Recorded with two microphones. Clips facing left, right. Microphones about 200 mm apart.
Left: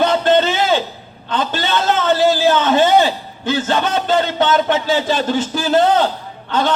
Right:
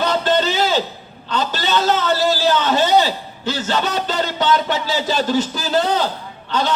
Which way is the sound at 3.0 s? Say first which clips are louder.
Left 3 dB; 55° left (ahead or behind).